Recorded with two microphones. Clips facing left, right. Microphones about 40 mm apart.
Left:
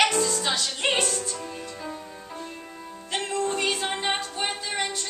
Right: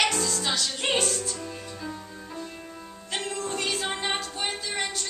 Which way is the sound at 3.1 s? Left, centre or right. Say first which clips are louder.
Left 4 dB; centre.